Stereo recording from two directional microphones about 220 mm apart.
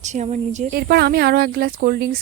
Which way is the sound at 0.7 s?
45° right (ahead or behind).